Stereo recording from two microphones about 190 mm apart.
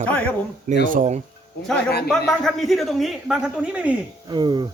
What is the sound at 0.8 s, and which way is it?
Speech, 40° right (ahead or behind).